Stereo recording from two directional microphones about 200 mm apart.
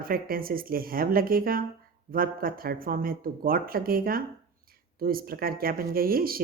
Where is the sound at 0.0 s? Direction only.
45° right (ahead or behind).